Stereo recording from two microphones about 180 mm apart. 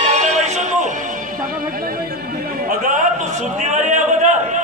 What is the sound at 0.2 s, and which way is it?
Music, 40° right (ahead or behind).